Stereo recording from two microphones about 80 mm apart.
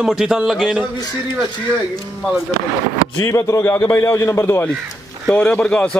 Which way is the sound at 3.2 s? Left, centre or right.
Left.